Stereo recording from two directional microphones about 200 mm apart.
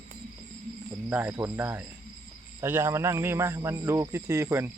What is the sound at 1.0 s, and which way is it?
A man's voice, 10° right (ahead or behind).